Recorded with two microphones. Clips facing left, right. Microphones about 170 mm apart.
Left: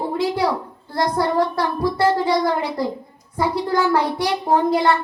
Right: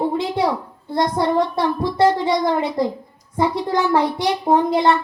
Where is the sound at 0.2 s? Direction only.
25° right (ahead or behind).